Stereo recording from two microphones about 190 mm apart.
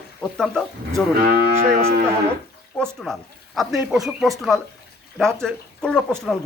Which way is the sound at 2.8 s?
5° left (ahead or behind).